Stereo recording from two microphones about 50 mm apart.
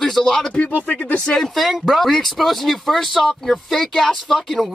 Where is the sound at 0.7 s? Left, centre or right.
Left.